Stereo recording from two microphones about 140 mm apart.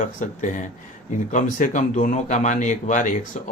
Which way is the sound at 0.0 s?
65° left (ahead or behind).